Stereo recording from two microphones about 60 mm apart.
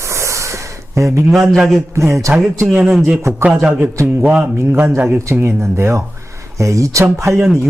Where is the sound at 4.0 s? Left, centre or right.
Right.